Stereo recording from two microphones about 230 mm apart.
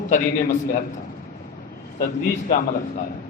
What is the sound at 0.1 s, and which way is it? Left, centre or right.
Speech, left.